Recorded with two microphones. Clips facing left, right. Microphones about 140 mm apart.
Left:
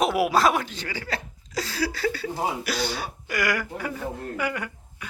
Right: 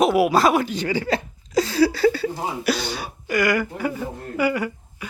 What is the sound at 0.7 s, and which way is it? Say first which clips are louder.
Speech: right 10 dB; 20° right (ahead or behind).